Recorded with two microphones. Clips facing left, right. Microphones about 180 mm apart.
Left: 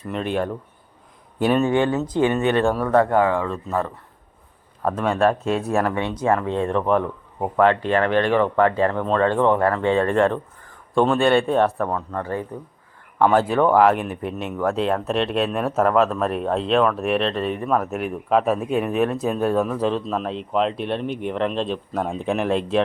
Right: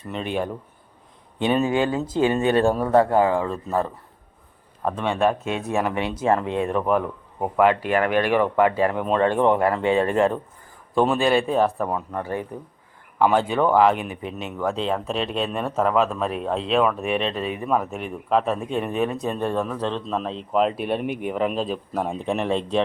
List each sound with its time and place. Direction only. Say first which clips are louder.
0.1 s speech: left 2 dB; centre (ahead or behind)
2.2 s speech: right 1 dB; 30° right (ahead or behind)
4.9 s speech: left 2 dB; centre (ahead or behind)
6.1 s speech: even; 25° right (ahead or behind)
6.5 s speech: left 1 dB; 10° right (ahead or behind)
11.9 s speech: left 1 dB; 15° right (ahead or behind)
13.1 s speech: left 2 dB; centre (ahead or behind)